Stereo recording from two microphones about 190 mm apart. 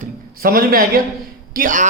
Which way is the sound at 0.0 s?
50° right (ahead or behind).